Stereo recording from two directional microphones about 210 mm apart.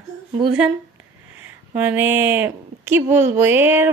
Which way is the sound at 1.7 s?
10° right (ahead or behind).